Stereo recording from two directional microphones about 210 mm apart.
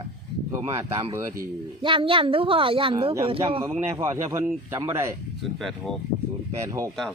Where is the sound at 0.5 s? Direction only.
15° right (ahead or behind).